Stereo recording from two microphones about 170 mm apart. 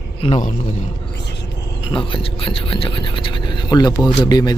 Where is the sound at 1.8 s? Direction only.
30° left (ahead or behind).